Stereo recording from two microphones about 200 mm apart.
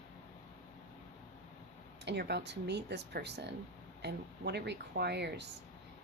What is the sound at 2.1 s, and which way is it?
Speech, 55° right (ahead or behind).